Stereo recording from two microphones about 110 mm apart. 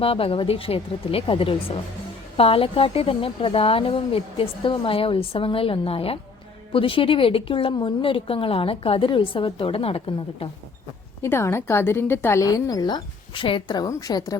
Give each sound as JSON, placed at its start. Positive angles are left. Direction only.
{"t": 0.0, "sound": "speech", "side_deg": 55}
{"t": 11.2, "sound": "a woman's voice", "side_deg": 25}